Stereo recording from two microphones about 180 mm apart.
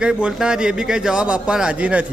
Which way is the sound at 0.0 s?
5° right (ahead or behind).